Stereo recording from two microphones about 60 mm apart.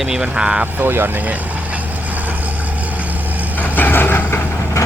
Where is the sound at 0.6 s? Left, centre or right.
Right.